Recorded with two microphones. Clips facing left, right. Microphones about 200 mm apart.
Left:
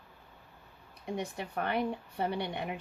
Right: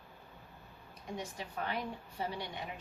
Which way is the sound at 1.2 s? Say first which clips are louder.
Left 5 dB; 60° left (ahead or behind).